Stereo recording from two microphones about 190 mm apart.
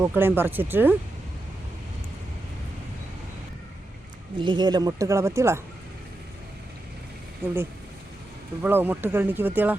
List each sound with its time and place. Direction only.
0.0 s speech: 10° right (ahead or behind)
4.4 s speech: 25° right (ahead or behind)
7.4 s speech: 10° right (ahead or behind)
8.6 s speech: 10° right (ahead or behind)